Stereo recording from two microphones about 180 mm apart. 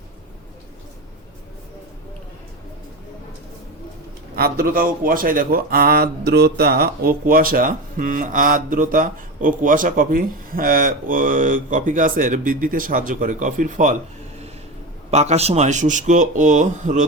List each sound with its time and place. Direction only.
4.4 s speech: 55° right (ahead or behind)
15.1 s speech: 40° right (ahead or behind)